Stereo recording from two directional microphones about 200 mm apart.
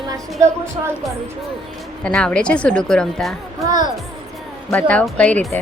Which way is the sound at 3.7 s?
20° right (ahead or behind).